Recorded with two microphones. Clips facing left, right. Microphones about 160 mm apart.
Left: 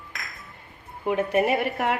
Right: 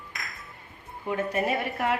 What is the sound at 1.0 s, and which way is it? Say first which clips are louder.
Speech: left 5 dB; 65° left (ahead or behind).